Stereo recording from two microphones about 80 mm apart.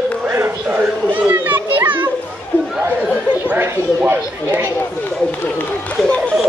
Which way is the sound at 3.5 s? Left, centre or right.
Right.